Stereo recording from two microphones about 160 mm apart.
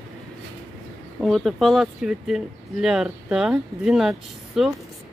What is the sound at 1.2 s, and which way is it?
Speech, centre (ahead or behind).